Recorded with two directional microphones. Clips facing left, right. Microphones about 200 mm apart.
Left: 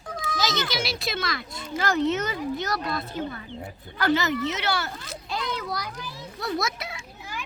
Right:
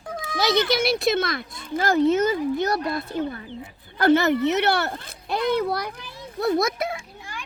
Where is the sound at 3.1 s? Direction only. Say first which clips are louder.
Right 4 dB; 50° right (ahead or behind).